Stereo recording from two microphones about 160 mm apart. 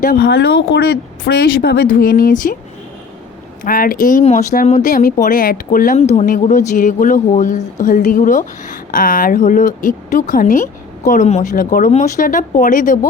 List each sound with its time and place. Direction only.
0.0 s a woman's voice: 60° left (ahead or behind)
0.7 s speech: 75° left (ahead or behind); by 2.6 s 60° left (ahead or behind)
3.6 s a woman's voice: 60° left (ahead or behind)
4.2 s a woman's voice: 45° left (ahead or behind)
6.0 s a woman's voice: 45° left (ahead or behind)
11.5 s a woman's voice: 60° left (ahead or behind)